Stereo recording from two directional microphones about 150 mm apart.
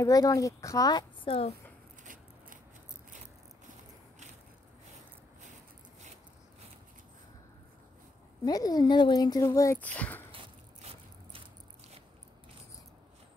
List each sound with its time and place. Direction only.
0.0 s speech: 25° left (ahead or behind)
8.5 s speech: 25° left (ahead or behind); by 10.2 s 10° left (ahead or behind)
10.3 s a sound: 40° right (ahead or behind)